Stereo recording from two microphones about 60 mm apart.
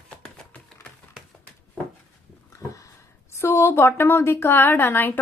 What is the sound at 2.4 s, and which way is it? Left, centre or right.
Speech, left.